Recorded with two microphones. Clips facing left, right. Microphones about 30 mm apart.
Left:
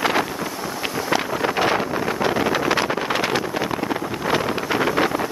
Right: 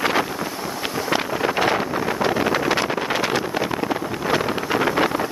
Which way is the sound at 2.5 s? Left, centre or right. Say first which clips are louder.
Even; left.